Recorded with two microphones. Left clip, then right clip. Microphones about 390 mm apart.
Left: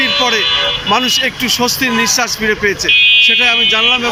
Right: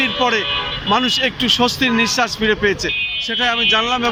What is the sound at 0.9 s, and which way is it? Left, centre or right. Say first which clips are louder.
Speech: even; centre.